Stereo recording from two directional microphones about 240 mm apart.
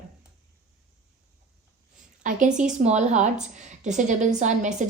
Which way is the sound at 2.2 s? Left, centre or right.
Right.